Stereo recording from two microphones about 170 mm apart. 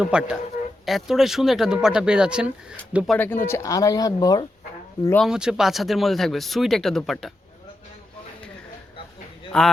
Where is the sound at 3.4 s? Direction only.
15° left (ahead or behind).